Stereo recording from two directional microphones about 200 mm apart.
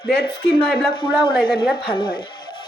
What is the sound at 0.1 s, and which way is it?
Speech, 55° left (ahead or behind).